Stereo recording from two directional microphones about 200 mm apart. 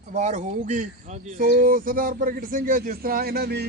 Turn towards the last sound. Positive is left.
turn(degrees=-50)  # may be behind; listen again after turning